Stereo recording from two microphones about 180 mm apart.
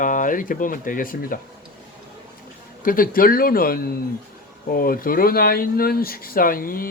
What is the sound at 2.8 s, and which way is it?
Speech, 50° left (ahead or behind).